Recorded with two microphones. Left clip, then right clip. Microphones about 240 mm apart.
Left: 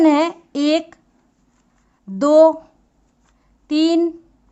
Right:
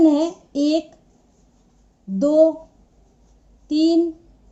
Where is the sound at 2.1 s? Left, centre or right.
Left.